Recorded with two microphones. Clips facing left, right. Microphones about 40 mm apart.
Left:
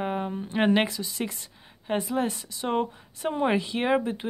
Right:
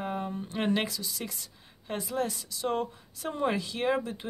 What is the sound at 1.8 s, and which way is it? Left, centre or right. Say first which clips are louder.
Speech: left 5 dB; left.